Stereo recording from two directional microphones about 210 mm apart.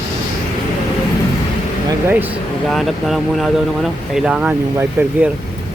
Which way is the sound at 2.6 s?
Centre (ahead or behind).